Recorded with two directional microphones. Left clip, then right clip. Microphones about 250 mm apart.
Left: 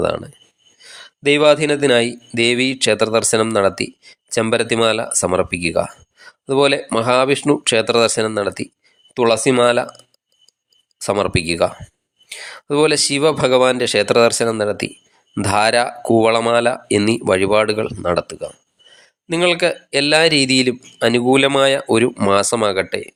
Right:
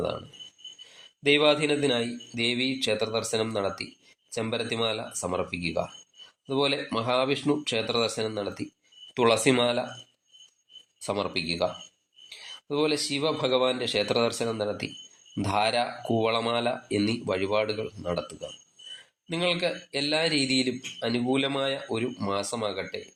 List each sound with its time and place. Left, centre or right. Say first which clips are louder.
0.8 s speech: left 14 dB; left
9.1 s speech: left 8 dB; left
11.0 s speech: left 11 dB; left